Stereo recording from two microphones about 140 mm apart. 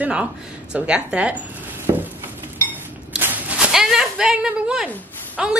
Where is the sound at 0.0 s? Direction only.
10° right (ahead or behind).